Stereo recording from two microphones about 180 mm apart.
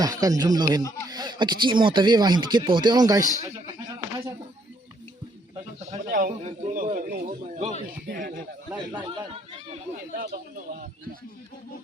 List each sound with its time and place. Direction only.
0.0 s speech: 20° right (ahead or behind)
3.4 s a sound: 20° right (ahead or behind)
6.1 s a man's voice: 50° right (ahead or behind)
8.9 s speech: 25° right (ahead or behind)